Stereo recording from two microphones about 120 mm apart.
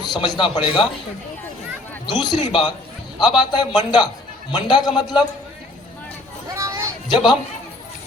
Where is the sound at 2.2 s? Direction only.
35° left (ahead or behind).